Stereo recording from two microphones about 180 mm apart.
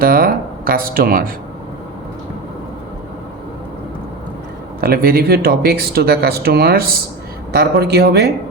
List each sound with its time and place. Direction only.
0.0 s speech: 55° right (ahead or behind)
4.8 s speech: 55° right (ahead or behind)